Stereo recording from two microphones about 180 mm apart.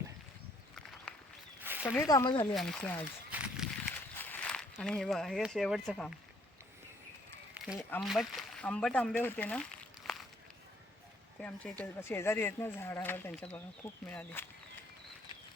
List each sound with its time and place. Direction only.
0.8 s walk: centre (ahead or behind)
1.8 s speech: 10° left (ahead or behind); by 2.6 s 25° left (ahead or behind)
2.6 s speech: 5° left (ahead or behind)
3.3 s a sound: 5° right (ahead or behind)
4.2 s speech: 10° left (ahead or behind)
7.5 s a sound: 5° right (ahead or behind)
8.0 s speech: centre (ahead or behind)
11.3 s speech: 5° left (ahead or behind)